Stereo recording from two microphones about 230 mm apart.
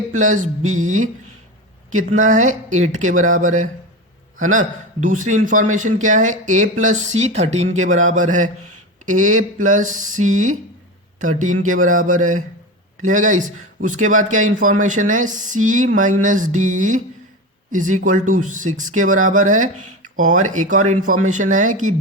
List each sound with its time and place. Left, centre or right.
0.1 s a man's voice: right